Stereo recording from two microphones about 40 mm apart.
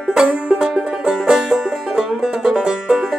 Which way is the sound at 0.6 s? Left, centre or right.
Centre.